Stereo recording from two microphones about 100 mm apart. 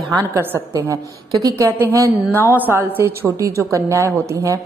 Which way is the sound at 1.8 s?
25° right (ahead or behind).